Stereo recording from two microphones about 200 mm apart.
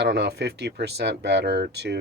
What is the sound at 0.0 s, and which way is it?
Speech, 60° right (ahead or behind).